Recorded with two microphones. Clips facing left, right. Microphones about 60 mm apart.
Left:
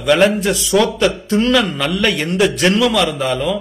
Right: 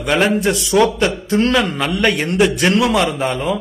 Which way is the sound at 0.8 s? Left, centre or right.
Right.